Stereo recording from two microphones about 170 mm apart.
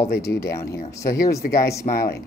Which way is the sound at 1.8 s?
60° left (ahead or behind).